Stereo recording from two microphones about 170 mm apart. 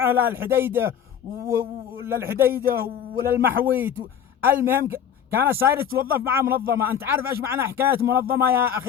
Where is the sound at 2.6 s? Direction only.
60° right (ahead or behind).